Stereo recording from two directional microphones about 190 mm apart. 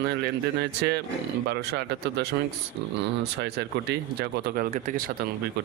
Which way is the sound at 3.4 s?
60° right (ahead or behind).